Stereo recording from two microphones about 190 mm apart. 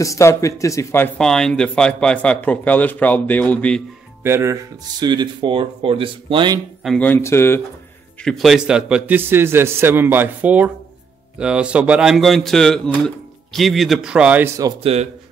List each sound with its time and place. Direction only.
0.0 s speech: 15° left (ahead or behind)
4.2 s speech: 15° right (ahead or behind)
6.8 s speech: 5° left (ahead or behind)
8.2 s a man's voice: centre (ahead or behind)
14.8 s speech: 30° right (ahead or behind)